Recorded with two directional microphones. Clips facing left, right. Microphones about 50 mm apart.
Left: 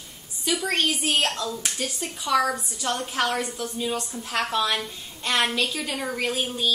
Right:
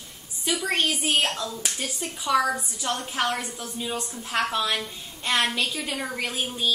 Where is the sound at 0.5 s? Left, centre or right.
Centre.